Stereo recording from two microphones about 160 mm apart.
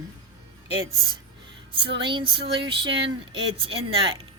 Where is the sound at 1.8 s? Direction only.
30° right (ahead or behind).